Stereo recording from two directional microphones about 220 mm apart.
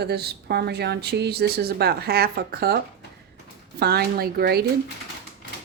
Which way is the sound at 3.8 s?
45° right (ahead or behind).